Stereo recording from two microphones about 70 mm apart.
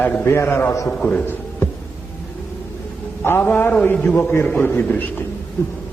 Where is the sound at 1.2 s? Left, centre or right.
Left.